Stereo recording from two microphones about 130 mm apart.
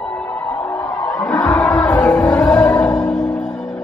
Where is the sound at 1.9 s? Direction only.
5° left (ahead or behind).